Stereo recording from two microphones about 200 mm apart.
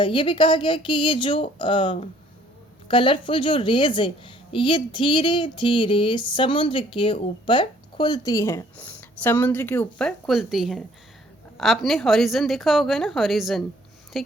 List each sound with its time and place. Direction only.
0.0 s a woman's voice: 25° left (ahead or behind); by 14.3 s centre (ahead or behind)